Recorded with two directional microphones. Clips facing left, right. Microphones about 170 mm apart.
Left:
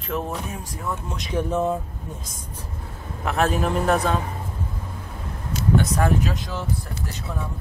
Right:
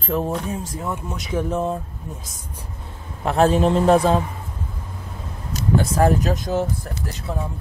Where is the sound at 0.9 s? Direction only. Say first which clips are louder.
Even; 5° right (ahead or behind).